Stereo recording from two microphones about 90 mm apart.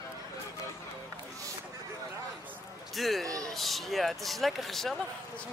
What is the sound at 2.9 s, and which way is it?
Speech, centre (ahead or behind).